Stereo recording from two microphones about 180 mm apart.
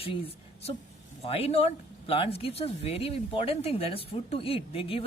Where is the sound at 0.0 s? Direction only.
30° left (ahead or behind).